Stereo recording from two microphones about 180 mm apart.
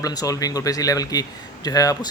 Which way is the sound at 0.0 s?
20° left (ahead or behind).